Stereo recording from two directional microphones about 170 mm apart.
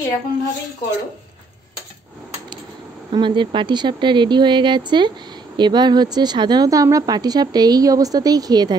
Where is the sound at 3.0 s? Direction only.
30° right (ahead or behind).